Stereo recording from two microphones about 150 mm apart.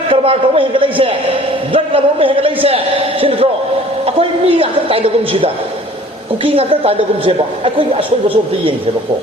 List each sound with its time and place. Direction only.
0.1 s a man's voice: 35° right (ahead or behind)